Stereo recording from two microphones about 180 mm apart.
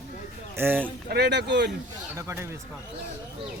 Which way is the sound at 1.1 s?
65° right (ahead or behind).